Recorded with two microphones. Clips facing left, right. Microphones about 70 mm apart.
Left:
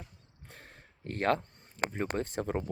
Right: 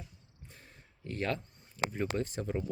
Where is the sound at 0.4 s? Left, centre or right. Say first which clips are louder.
Left 4 dB; left.